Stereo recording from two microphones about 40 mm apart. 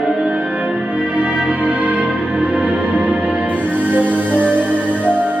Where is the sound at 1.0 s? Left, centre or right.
Right.